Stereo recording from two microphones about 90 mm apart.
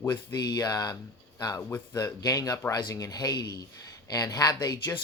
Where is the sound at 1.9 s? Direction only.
40° left (ahead or behind).